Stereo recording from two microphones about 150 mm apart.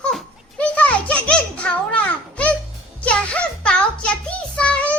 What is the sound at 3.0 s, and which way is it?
Music, 10° left (ahead or behind).